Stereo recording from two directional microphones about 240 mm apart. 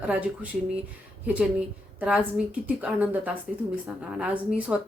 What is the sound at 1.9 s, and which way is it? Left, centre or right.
A woman's voice, centre.